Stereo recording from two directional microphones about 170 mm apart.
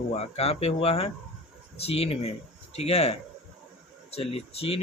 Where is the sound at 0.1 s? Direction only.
35° left (ahead or behind).